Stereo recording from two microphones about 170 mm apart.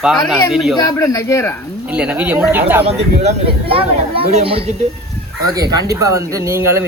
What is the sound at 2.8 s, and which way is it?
Speech, 35° right (ahead or behind).